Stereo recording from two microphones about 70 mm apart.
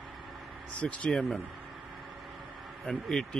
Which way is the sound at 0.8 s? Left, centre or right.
Centre.